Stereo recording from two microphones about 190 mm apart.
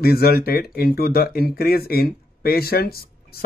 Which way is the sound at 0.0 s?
55° left (ahead or behind).